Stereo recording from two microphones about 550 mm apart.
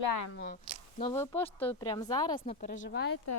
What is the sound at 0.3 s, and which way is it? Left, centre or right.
A woman's voice, centre.